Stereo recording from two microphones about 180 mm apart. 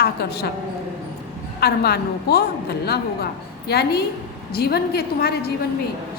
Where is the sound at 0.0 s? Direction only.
60° left (ahead or behind).